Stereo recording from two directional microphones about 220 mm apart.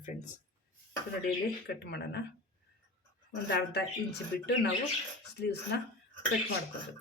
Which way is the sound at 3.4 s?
50° left (ahead or behind).